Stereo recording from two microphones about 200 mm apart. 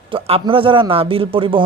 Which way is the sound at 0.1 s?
25° right (ahead or behind).